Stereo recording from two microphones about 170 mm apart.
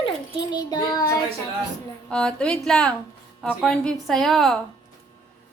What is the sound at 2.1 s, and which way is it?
Speech, 5° left (ahead or behind).